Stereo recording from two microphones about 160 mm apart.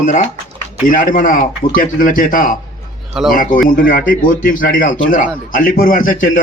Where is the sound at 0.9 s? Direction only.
55° left (ahead or behind).